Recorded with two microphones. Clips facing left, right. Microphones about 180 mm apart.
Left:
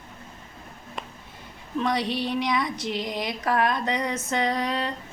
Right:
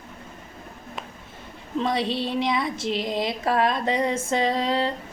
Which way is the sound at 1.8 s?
25° right (ahead or behind).